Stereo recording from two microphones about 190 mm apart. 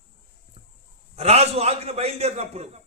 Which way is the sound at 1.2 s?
35° right (ahead or behind).